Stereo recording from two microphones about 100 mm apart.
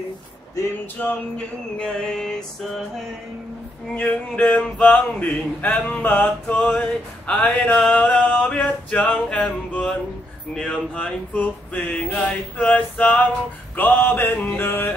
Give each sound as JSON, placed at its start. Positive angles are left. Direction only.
{"t": 1.0, "sound": "male singing", "side_deg": 15}
{"t": 3.9, "sound": "male singing", "side_deg": 15}
{"t": 6.6, "sound": "male singing", "side_deg": 5}
{"t": 13.7, "sound": "mantra", "side_deg": 20}